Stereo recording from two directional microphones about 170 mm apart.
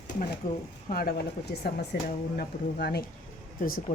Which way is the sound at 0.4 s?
55° left (ahead or behind).